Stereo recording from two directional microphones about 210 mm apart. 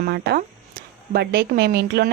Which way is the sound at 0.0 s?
45° right (ahead or behind).